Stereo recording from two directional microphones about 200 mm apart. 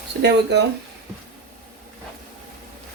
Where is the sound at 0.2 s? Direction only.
60° right (ahead or behind).